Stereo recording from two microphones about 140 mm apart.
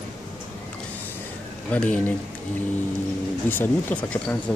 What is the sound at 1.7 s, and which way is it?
Speech, 10° left (ahead or behind).